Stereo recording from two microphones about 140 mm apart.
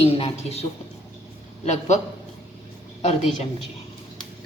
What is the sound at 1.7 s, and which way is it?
Speech, 55° left (ahead or behind).